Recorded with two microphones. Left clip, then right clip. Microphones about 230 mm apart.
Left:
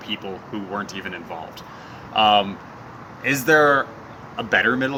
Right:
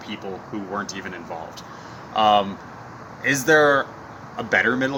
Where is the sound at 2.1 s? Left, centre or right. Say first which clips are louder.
Left 1 dB; centre.